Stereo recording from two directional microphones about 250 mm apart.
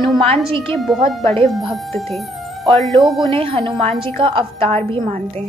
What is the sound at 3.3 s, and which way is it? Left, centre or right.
A woman's voice, right.